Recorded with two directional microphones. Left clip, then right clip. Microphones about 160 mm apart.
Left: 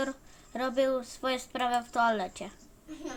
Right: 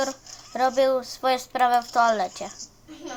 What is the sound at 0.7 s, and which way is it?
Speech, 30° left (ahead or behind).